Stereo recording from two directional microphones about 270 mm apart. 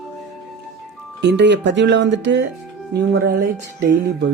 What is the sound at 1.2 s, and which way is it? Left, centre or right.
Speech, right.